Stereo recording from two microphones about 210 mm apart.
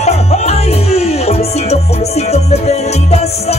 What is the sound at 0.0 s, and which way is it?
Music, 30° left (ahead or behind).